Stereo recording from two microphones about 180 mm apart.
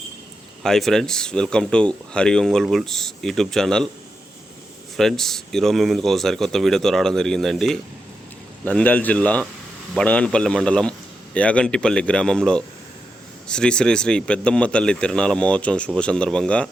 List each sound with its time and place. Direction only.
0.6 s speech: centre (ahead or behind)
4.9 s a man's voice: centre (ahead or behind)